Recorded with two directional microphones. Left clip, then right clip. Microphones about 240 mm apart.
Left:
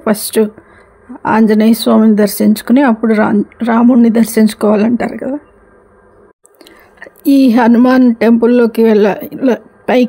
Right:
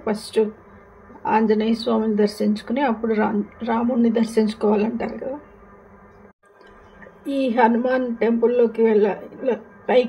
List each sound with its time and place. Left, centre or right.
0.0 s speech: left
7.2 s speech: left